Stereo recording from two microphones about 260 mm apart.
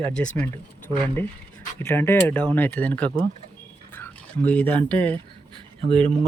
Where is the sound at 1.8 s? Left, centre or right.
Centre.